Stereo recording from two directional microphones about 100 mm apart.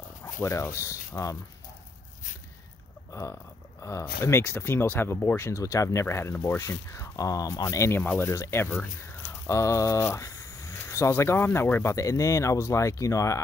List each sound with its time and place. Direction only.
0.4 s speech: 30° left (ahead or behind)
3.1 s a sound: 30° left (ahead or behind)
3.8 s speech: 25° left (ahead or behind)
7.6 s speech: 25° left (ahead or behind)
8.6 s speech: 10° left (ahead or behind)
9.3 s speech: 30° left (ahead or behind)